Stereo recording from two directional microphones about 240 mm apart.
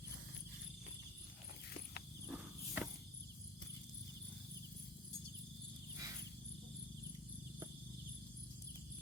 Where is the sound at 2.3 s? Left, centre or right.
Centre.